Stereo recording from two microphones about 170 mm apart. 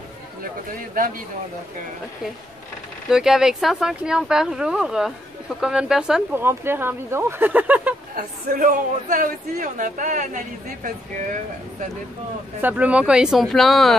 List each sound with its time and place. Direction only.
0.9 s speech: 55° right (ahead or behind)
3.1 s speech: 5° right (ahead or behind)
8.2 s speech: 55° right (ahead or behind)
12.6 s speech: 10° right (ahead or behind)